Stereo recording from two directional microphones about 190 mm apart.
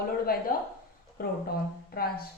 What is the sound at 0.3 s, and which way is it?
A woman's voice, 50° left (ahead or behind).